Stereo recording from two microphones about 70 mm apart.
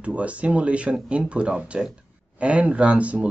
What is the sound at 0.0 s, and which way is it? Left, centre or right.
Speech, centre.